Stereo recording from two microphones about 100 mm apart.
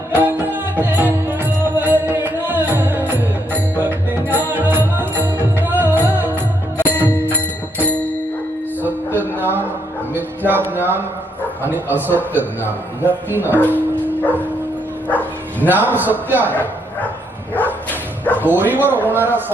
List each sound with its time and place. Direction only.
0.1 s music: 20° right (ahead or behind)
9.4 s a sound: 20° right (ahead or behind)
10.2 s music: 20° right (ahead or behind)
10.7 s a man's voice: 20° right (ahead or behind)
14.2 s bow-wow: 15° left (ahead or behind)
15.7 s a man's voice: 20° right (ahead or behind)
17.5 s bow-wow: 20° left (ahead or behind)
18.3 s a man's voice: 20° right (ahead or behind)